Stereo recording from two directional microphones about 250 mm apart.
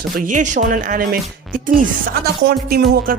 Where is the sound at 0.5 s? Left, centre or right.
Right.